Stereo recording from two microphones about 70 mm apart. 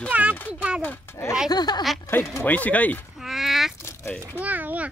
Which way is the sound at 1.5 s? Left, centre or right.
Left.